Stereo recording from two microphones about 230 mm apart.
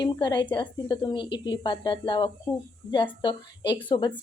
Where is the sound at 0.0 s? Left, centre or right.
Centre.